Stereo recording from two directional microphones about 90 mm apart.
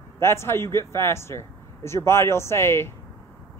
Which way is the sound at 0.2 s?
30° left (ahead or behind).